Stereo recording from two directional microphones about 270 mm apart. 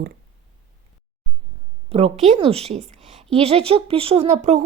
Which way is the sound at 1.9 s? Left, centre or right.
Right.